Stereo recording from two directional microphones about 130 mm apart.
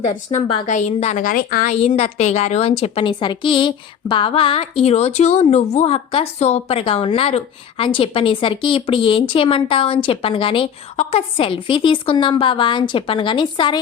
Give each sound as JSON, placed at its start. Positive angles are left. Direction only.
{"t": 0.0, "sound": "a woman's voice", "side_deg": 70}
{"t": 1.7, "sound": "a woman's voice", "side_deg": 50}